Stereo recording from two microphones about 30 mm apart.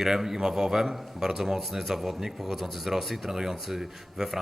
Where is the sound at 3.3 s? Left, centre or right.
Centre.